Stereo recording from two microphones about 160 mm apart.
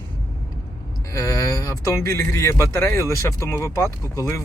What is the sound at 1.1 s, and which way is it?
Speech, 20° left (ahead or behind).